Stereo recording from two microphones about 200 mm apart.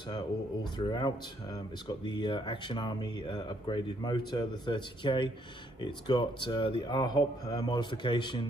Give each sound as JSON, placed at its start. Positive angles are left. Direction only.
{"t": 0.7, "sound": "speech", "side_deg": 20}